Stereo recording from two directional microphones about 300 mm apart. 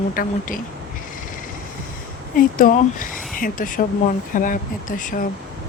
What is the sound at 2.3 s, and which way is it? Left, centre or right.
Speech, left.